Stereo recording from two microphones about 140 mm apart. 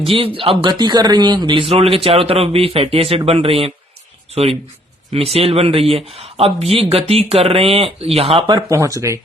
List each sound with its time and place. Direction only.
0.0 s speech: 40° right (ahead or behind)
8.4 s speech: 25° right (ahead or behind)